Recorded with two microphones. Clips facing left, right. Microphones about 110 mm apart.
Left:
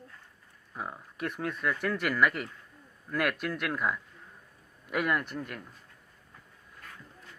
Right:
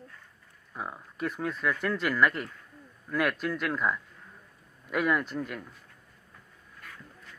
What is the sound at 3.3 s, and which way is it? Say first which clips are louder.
Speech: right 2 dB; 55° left (ahead or behind).